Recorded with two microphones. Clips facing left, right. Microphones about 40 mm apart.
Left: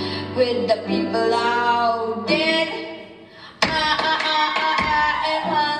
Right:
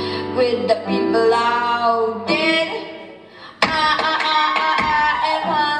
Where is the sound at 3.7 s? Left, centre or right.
Right.